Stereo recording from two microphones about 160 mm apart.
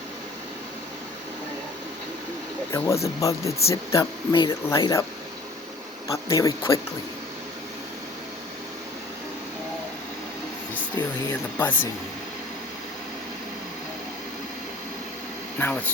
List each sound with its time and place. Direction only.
2.7 s speech: 15° left (ahead or behind)
6.1 s speech: 20° left (ahead or behind)
11.3 s speech: 10° left (ahead or behind)
15.5 s speech: 10° left (ahead or behind)